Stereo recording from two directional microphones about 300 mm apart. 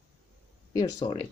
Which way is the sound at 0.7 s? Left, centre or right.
Centre.